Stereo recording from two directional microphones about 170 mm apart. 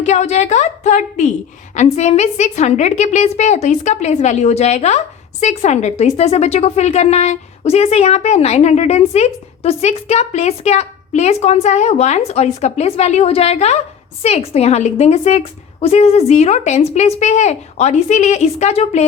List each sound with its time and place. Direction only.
0.0 s a woman's voice: 40° left (ahead or behind)